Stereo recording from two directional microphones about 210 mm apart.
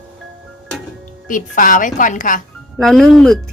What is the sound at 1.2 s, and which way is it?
A woman's voice, 40° left (ahead or behind).